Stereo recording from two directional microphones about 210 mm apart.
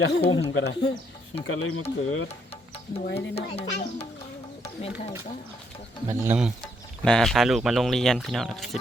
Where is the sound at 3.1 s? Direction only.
30° left (ahead or behind).